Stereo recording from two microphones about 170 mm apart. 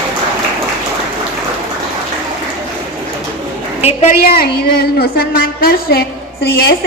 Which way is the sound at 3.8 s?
40° left (ahead or behind).